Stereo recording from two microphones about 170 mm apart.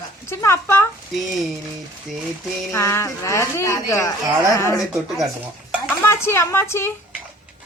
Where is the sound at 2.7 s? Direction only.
15° left (ahead or behind).